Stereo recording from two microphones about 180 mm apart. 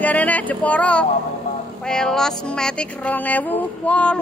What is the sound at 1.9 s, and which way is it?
Music, 5° left (ahead or behind).